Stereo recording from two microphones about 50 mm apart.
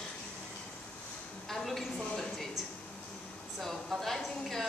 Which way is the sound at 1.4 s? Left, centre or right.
Centre.